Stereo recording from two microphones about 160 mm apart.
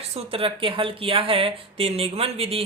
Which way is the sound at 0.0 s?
40° right (ahead or behind).